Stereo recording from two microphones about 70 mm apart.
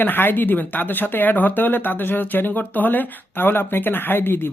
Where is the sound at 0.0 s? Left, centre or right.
Left.